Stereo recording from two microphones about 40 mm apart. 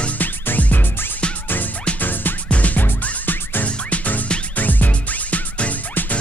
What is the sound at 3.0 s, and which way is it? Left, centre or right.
Music, left.